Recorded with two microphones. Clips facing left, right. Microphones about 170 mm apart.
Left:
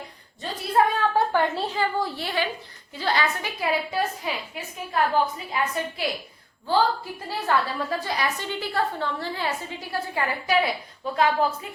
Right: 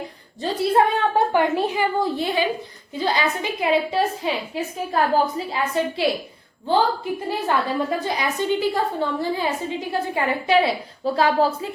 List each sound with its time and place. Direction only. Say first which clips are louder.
1.1 s a woman's voice: right 4 dB; 15° right (ahead or behind)
4.9 s a woman's voice: right 2 dB; 35° right (ahead or behind)
6.7 s a woman's voice: right 3 dB; 20° right (ahead or behind)